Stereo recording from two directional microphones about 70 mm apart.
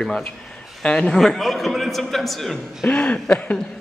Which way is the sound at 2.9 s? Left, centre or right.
Centre.